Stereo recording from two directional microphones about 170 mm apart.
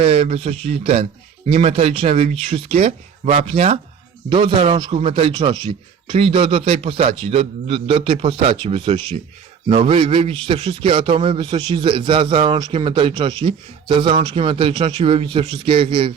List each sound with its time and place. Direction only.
0.0 s a man's voice: 35° right (ahead or behind)